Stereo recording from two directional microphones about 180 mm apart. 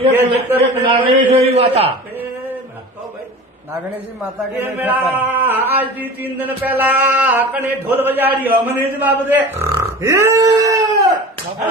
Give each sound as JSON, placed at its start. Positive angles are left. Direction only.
{"t": 0.1, "sound": "speech", "side_deg": -15}
{"t": 0.6, "sound": "a man's voice", "side_deg": -30}
{"t": 4.5, "sound": "speech", "side_deg": -10}